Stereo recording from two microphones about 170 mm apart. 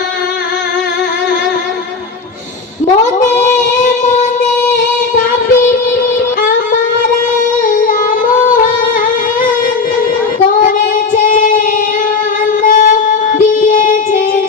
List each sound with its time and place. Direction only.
3.8 s music: 45° left (ahead or behind)
11.1 s singing: 55° left (ahead or behind)
12.6 s child singing: 50° left (ahead or behind)